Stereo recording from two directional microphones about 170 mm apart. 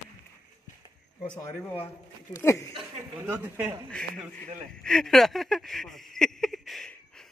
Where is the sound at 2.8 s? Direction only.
10° right (ahead or behind).